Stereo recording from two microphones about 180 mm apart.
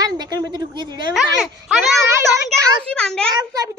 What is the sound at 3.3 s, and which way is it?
Speech, 20° right (ahead or behind).